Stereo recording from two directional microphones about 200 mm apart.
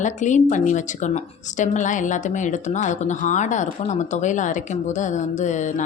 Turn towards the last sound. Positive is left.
turn(degrees=40)  # may be behind; listen again after turning